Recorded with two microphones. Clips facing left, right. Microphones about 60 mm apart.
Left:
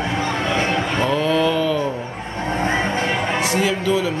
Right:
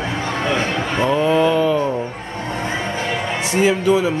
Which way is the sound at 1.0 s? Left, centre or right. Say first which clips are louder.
Right 4 dB; centre.